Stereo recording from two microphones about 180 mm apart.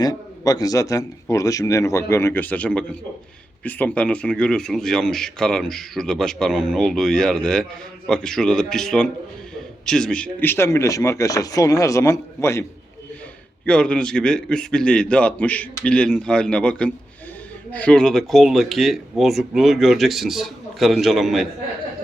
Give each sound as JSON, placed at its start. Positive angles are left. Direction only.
{"t": 0.0, "sound": "speech", "side_deg": 20}
{"t": 13.7, "sound": "speech", "side_deg": 5}